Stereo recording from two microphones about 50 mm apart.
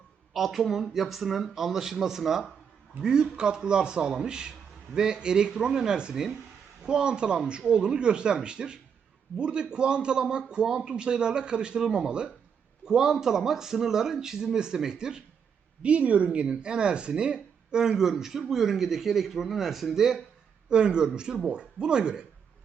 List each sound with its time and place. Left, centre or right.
0.3 s speech: centre
15.8 s speech: right